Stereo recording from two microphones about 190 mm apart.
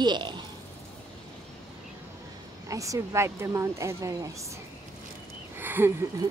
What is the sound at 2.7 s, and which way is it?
A woman's voice, 15° right (ahead or behind).